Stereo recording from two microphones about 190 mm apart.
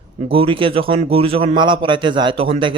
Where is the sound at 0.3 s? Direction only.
25° right (ahead or behind).